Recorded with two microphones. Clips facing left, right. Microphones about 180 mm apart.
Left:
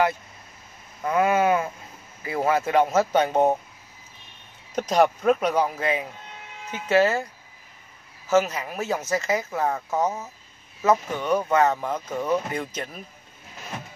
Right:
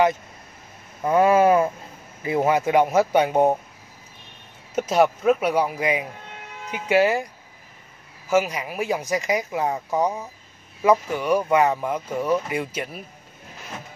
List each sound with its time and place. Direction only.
1.0 s speech: 30° right (ahead or behind)
2.2 s speech: 20° right (ahead or behind)
4.7 s speech: 5° right (ahead or behind)
8.3 s speech: 10° right (ahead or behind)